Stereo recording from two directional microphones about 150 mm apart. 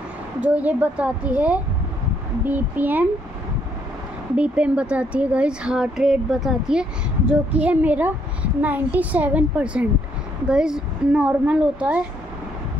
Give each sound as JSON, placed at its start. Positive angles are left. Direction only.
{"t": 0.4, "sound": "speech", "side_deg": -10}
{"t": 4.4, "sound": "speech", "side_deg": -10}